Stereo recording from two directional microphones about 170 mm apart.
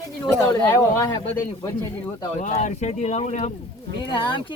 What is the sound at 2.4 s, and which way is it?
Speech, 45° left (ahead or behind).